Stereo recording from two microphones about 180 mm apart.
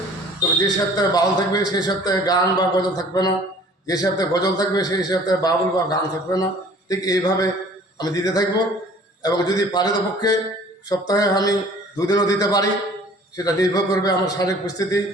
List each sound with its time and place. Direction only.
0.6 s a man's voice: 20° left (ahead or behind)